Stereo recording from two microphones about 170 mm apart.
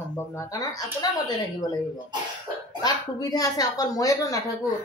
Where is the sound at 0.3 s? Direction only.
20° left (ahead or behind).